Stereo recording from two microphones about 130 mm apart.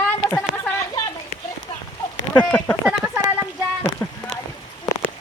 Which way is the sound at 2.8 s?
5° right (ahead or behind).